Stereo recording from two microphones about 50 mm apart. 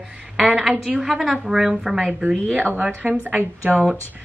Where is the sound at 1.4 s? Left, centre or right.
Centre.